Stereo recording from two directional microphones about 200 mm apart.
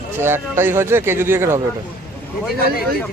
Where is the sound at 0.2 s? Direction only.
10° right (ahead or behind).